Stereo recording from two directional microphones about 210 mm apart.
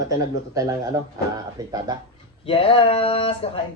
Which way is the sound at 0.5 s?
15° right (ahead or behind).